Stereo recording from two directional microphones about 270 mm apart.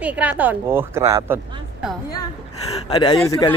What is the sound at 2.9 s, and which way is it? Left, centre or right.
Speech, centre.